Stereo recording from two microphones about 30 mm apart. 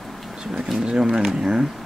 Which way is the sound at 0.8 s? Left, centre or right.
Right.